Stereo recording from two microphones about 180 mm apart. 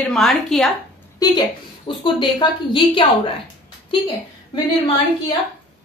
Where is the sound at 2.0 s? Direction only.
25° left (ahead or behind).